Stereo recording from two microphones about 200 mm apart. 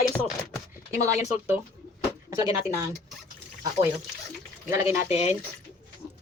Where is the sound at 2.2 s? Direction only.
15° right (ahead or behind).